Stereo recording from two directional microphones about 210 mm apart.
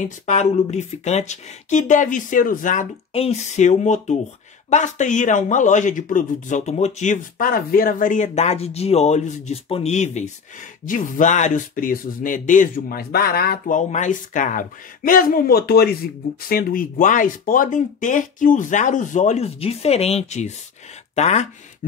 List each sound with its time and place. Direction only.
0.0 s a man's voice: 35° left (ahead or behind)